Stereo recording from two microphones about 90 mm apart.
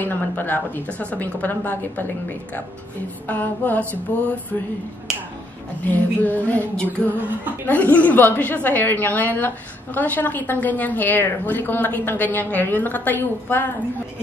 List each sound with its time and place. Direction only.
0.0 s a woman's voice: 20° left (ahead or behind)
5.9 s a woman's voice: 20° left (ahead or behind)
7.1 s speech: 20° right (ahead or behind)
7.6 s a woman's voice: 20° left (ahead or behind)